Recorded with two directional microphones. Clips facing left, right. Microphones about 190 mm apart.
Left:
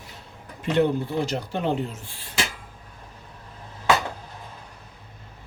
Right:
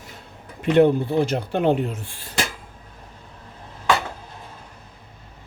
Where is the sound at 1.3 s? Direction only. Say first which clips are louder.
Right 6 dB; 55° right (ahead or behind).